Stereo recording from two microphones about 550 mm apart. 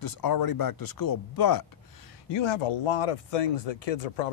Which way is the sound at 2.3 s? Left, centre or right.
Left.